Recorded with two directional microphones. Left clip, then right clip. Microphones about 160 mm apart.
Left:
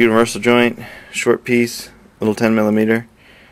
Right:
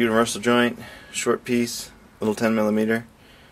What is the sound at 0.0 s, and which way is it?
Speech, 15° left (ahead or behind).